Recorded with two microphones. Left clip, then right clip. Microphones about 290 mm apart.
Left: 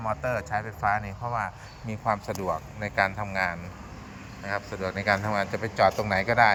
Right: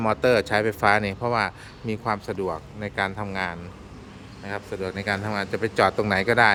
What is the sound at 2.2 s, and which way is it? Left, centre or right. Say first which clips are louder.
Speech: right 1 dB; centre.